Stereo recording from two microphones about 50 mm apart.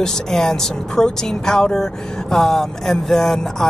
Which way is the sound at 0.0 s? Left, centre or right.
Centre.